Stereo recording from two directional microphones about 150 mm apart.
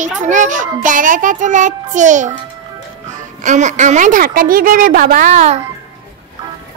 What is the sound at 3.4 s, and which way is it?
A child's voice, 55° right (ahead or behind).